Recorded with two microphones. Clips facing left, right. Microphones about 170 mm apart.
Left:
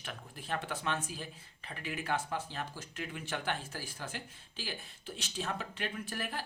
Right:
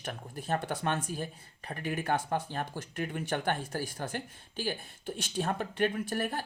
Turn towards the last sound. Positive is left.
turn(degrees=-50)  # may be behind; listen again after turning